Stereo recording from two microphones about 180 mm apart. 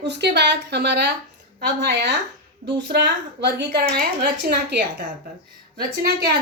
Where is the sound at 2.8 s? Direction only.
75° right (ahead or behind).